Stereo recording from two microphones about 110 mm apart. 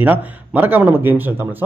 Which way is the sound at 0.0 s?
15° right (ahead or behind).